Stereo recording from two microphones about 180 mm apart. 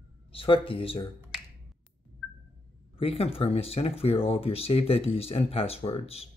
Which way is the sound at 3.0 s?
30° left (ahead or behind).